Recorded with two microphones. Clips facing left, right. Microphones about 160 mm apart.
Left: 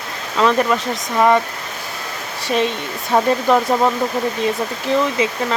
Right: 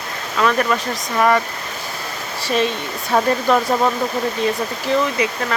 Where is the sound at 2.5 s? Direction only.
20° left (ahead or behind).